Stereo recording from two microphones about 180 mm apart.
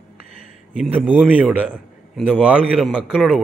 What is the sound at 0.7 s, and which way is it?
A man's voice, 10° right (ahead or behind).